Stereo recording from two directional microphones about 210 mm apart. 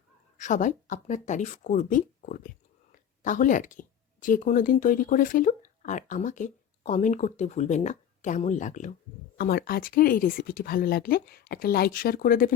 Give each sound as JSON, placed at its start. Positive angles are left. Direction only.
{"t": 0.3, "sound": "speech", "side_deg": 35}
{"t": 9.4, "sound": "speech", "side_deg": 45}